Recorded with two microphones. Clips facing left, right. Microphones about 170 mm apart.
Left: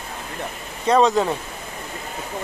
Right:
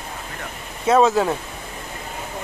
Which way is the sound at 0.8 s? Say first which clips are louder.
Right 1 dB; 5° right (ahead or behind).